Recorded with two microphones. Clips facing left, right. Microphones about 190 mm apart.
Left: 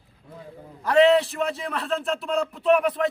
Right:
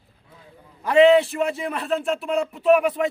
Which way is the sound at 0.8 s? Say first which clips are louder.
Right 3 dB; 5° right (ahead or behind).